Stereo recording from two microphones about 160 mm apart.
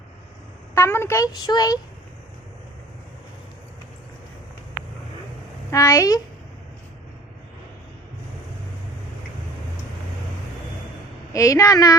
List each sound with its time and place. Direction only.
0.8 s a woman's voice: 15° left (ahead or behind)
5.7 s a woman's voice: 20° left (ahead or behind)
11.3 s a woman's voice: 20° left (ahead or behind)